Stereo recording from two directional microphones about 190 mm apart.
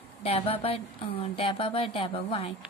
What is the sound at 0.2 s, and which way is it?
A woman's voice, 30° left (ahead or behind).